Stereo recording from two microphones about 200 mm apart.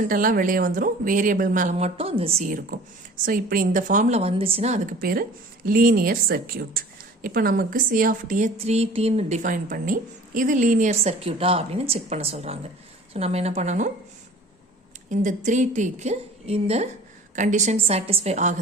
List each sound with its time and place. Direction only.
0.1 s a woman's voice: 45° right (ahead or behind)
15.1 s a woman's voice: 40° right (ahead or behind)